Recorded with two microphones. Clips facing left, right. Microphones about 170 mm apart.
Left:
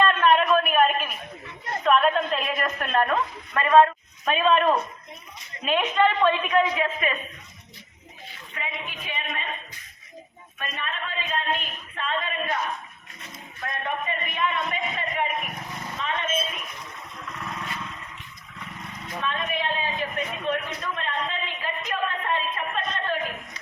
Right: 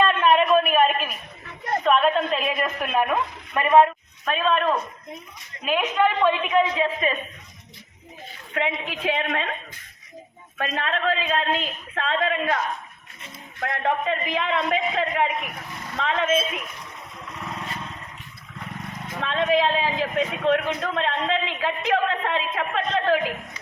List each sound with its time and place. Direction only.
0.0 s a sound: 5° right (ahead or behind)
3.5 s speech: 20° right (ahead or behind)
4.3 s a woman's voice: centre (ahead or behind); by 6.8 s 20° right (ahead or behind)
6.8 s a woman's voice: 30° right (ahead or behind)
8.5 s a man's voice: 90° right
10.6 s a man's voice: 90° right
13.6 s a man's voice: 90° right
19.2 s a man's voice: 90° right